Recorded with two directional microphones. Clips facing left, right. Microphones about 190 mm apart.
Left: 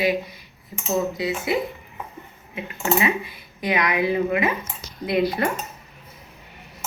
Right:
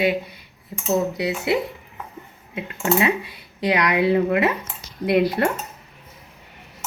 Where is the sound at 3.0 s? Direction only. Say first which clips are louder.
Right 2 dB; 70° right (ahead or behind).